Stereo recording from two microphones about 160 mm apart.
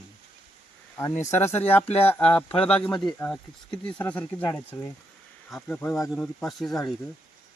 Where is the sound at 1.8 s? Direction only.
40° left (ahead or behind).